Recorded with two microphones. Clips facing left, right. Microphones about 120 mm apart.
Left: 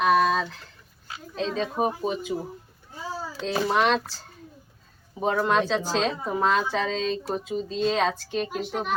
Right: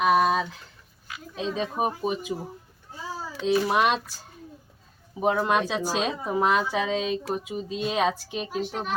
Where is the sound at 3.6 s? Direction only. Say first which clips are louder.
Left 5 dB; 15° right (ahead or behind).